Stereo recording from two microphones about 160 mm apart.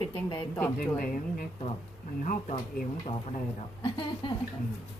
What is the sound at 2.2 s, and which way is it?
Speech, 50° left (ahead or behind).